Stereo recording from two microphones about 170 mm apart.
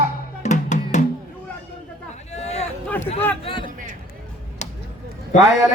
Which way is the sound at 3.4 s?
30° left (ahead or behind).